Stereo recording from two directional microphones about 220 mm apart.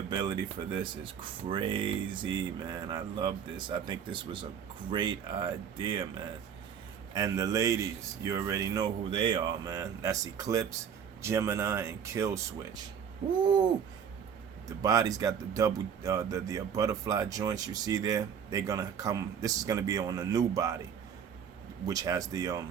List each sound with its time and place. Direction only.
0.1 s speech: 20° right (ahead or behind)
14.8 s speech: 15° right (ahead or behind)
21.8 s speech: 15° right (ahead or behind)